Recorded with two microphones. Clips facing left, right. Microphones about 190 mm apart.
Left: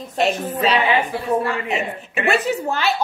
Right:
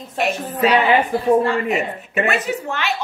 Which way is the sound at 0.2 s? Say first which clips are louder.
Even; 25° left (ahead or behind).